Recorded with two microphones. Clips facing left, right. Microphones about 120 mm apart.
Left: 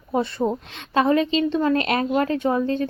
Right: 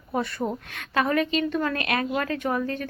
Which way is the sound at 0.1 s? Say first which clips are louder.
Left 5 dB; 25° left (ahead or behind).